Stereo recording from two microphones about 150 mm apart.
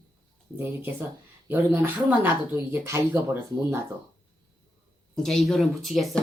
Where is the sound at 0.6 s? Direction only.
15° right (ahead or behind).